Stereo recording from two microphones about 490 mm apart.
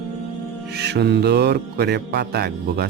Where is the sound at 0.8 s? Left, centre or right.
Centre.